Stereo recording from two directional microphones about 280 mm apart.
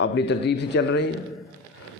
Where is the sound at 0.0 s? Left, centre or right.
Left.